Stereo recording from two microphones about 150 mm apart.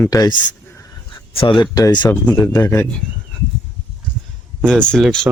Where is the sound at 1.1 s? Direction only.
35° left (ahead or behind); by 3.0 s 15° left (ahead or behind).